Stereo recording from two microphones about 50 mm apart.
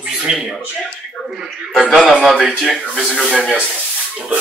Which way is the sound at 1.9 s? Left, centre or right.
Centre.